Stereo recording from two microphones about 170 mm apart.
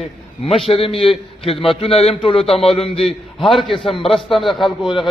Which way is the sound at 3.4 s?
Centre (ahead or behind).